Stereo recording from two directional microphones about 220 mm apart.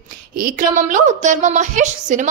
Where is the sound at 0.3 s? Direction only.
40° right (ahead or behind).